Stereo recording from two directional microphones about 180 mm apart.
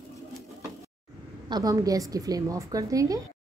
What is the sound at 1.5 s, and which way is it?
A woman's voice, 20° right (ahead or behind).